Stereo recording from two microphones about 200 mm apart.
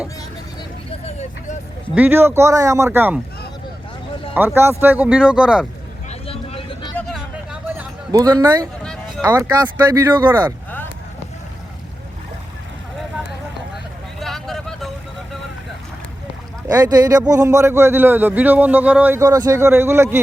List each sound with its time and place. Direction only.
0.9 s vehicle: 35° left (ahead or behind)
2.0 s a man's voice: 10° right (ahead or behind)
4.4 s a man's voice: 10° right (ahead or behind)
6.1 s vehicle: 30° left (ahead or behind)
6.9 s vehicle: centre (ahead or behind)
8.1 s a man's voice: 15° right (ahead or behind)
8.8 s run: 5° left (ahead or behind)
9.2 s a man's voice: 10° right (ahead or behind)
14.2 s vehicle: centre (ahead or behind)
16.6 s a man's voice: 20° right (ahead or behind)